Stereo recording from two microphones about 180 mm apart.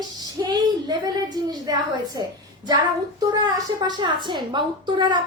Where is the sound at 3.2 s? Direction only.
25° right (ahead or behind).